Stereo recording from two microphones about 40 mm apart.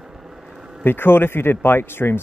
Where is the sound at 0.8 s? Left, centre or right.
Left.